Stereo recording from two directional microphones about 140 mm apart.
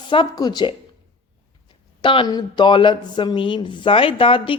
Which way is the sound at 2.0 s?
35° left (ahead or behind).